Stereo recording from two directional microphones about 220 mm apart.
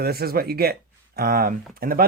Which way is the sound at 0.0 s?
45° right (ahead or behind).